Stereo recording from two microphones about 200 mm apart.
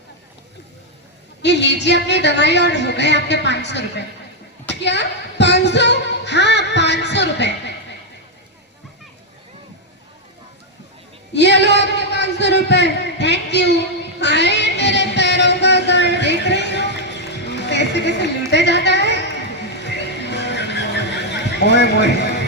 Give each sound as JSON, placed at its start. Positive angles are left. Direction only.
{"t": 1.4, "sound": "a woman's voice", "side_deg": 60}
{"t": 11.3, "sound": "a sound", "side_deg": 60}
{"t": 19.8, "sound": "music", "side_deg": 60}